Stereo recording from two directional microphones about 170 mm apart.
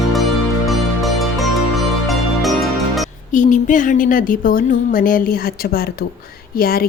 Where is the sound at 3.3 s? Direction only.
45° left (ahead or behind).